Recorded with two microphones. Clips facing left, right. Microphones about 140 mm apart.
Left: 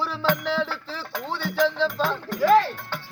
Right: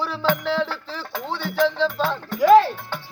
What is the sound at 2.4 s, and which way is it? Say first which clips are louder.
Cowbell: right 5 dB; 15° right (ahead or behind).